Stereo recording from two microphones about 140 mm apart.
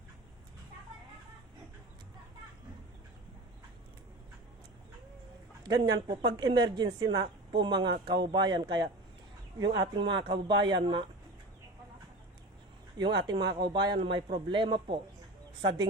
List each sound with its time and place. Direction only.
5.6 s a woman's voice: 30° right (ahead or behind)
13.0 s a woman's voice: 30° right (ahead or behind)